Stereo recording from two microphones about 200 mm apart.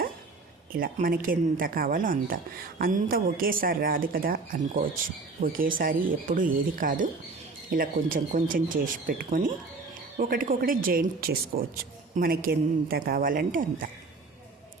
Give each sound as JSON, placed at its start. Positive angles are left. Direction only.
{"t": 0.7, "sound": "speech", "side_deg": -45}